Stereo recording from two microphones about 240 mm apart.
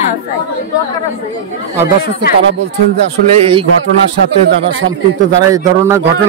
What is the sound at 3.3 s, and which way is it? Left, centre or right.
Speech, right.